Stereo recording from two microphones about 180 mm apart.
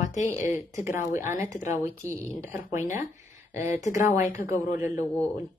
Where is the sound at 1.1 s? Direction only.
15° right (ahead or behind).